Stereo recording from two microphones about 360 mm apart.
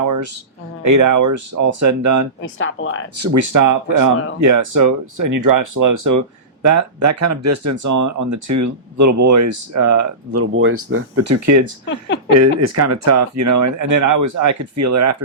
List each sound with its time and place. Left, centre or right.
0.9 s speech: right
2.4 s speech: left
3.2 s speech: right
11.9 s speech: left
12.3 s speech: right